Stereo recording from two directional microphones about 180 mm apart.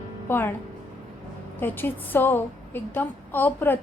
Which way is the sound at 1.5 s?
10° left (ahead or behind).